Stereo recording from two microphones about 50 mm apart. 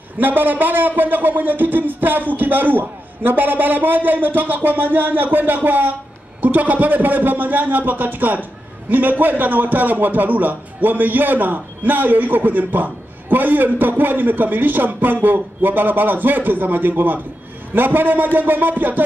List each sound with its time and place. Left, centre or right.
0.2 s a man's voice: right